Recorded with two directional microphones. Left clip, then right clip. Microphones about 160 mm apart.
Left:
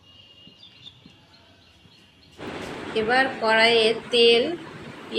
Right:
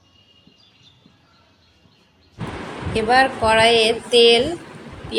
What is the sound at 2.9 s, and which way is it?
Speech, 40° right (ahead or behind).